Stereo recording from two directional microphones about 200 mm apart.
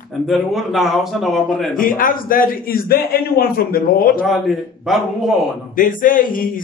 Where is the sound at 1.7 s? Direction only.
45° left (ahead or behind).